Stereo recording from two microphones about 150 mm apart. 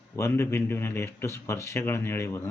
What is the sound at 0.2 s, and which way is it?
Speech, 15° left (ahead or behind).